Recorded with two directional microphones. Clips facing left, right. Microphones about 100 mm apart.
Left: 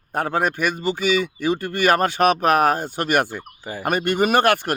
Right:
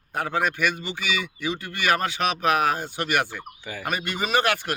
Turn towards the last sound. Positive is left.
turn(degrees=50)  # may be behind; listen again after turning